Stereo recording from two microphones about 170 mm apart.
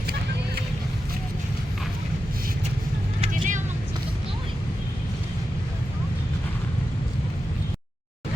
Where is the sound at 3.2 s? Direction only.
45° right (ahead or behind).